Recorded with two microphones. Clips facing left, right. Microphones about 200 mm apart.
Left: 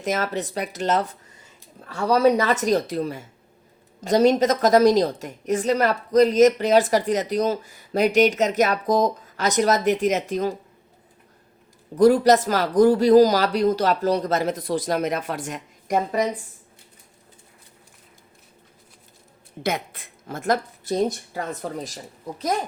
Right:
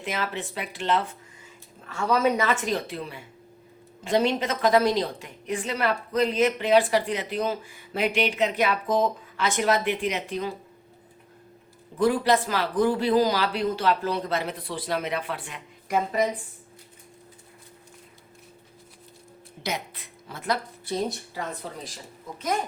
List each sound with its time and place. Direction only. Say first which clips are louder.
0.0 s a woman's voice: left 6 dB; 45° left (ahead or behind)
11.9 s speech: left 7 dB; 40° left (ahead or behind)
19.6 s a woman's voice: left 6 dB; 50° left (ahead or behind)